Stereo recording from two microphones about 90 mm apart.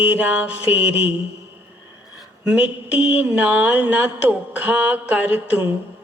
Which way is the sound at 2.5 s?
10° right (ahead or behind).